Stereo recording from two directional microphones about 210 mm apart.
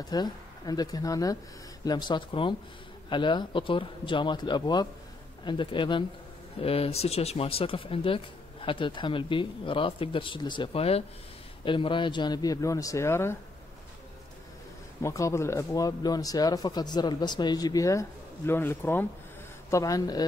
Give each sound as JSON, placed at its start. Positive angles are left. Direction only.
{"t": 0.0, "sound": "speech", "side_deg": 20}
{"t": 15.0, "sound": "speech", "side_deg": 15}